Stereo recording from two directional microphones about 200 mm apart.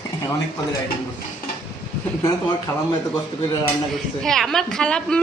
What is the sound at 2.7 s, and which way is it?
Speech, 15° left (ahead or behind).